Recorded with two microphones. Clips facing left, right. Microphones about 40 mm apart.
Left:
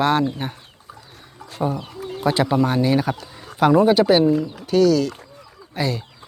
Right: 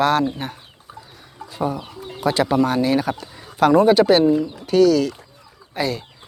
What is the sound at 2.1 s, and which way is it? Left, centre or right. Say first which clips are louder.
Speech: right 1 dB; centre.